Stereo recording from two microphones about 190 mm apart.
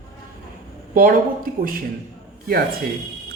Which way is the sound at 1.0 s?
50° right (ahead or behind).